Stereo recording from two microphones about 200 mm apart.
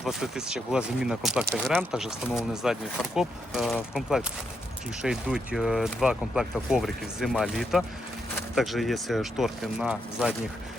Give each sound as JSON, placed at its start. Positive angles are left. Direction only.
{"t": 0.0, "sound": "speech", "side_deg": -5}